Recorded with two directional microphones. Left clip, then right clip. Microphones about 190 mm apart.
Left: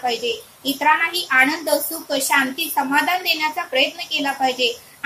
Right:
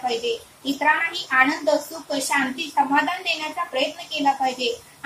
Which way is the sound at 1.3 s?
30° left (ahead or behind).